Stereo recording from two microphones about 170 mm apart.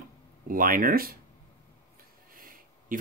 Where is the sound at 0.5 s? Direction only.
55° right (ahead or behind).